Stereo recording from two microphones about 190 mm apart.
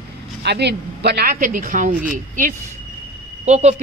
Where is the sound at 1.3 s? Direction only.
45° right (ahead or behind).